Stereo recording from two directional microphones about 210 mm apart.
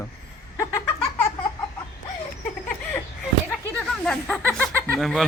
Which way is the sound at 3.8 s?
5° left (ahead or behind).